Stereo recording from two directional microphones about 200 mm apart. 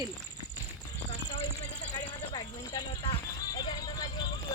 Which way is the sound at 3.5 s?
20° left (ahead or behind).